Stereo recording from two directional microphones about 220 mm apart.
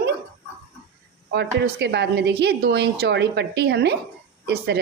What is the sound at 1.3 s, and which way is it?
A woman's voice, 50° right (ahead or behind).